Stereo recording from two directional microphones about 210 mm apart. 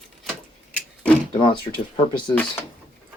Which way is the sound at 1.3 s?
25° left (ahead or behind).